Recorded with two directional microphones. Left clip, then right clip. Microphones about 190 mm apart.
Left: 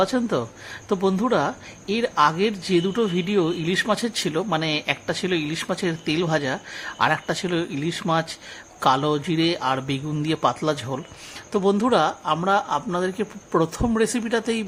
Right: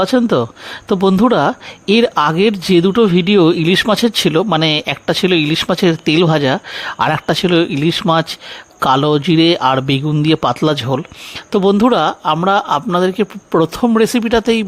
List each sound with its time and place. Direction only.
0.0 s a man's voice: 40° right (ahead or behind)